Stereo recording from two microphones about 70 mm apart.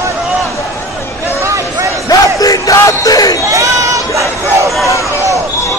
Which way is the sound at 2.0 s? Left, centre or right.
Left.